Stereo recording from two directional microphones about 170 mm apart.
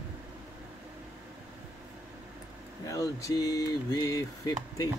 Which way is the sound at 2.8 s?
20° left (ahead or behind).